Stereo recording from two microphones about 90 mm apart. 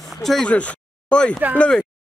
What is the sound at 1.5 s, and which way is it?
Speech, 15° left (ahead or behind).